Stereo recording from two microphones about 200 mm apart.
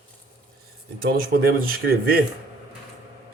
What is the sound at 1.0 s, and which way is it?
Speech, 50° right (ahead or behind).